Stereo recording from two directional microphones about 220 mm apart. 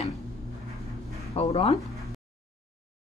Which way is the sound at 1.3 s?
25° left (ahead or behind).